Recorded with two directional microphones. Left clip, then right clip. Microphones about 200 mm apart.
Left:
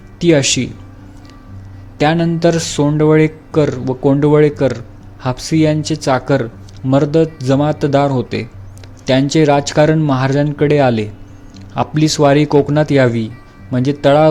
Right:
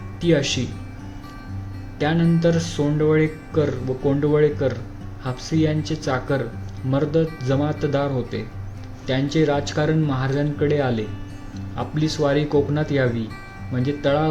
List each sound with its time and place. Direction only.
0.2 s speech: 35° left (ahead or behind)
2.0 s speech: 35° left (ahead or behind)